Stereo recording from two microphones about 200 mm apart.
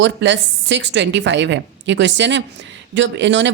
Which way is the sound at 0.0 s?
65° right (ahead or behind).